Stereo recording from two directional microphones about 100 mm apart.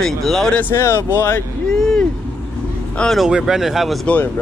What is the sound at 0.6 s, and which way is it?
Speech, 25° left (ahead or behind).